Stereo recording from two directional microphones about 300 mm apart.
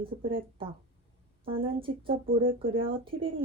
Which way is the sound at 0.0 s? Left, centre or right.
Centre.